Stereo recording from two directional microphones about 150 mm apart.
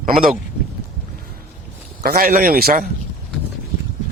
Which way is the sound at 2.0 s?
80° right.